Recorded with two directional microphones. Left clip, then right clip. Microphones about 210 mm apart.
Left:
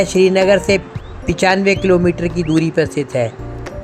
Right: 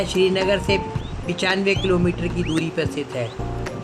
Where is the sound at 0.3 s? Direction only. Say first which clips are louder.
Left 8 dB; 25° left (ahead or behind).